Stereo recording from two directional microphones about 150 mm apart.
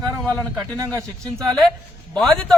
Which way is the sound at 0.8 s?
20° right (ahead or behind).